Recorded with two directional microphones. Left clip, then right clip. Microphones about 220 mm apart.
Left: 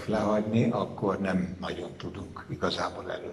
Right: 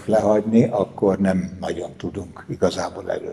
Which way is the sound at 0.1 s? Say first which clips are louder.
Right 10 dB; 30° right (ahead or behind).